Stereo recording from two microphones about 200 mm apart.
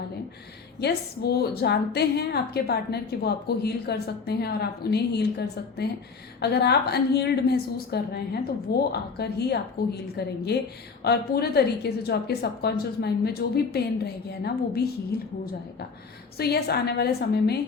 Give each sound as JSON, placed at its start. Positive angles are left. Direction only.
{"t": 0.8, "sound": "a woman's voice", "side_deg": 55}
{"t": 16.4, "sound": "a woman's voice", "side_deg": 50}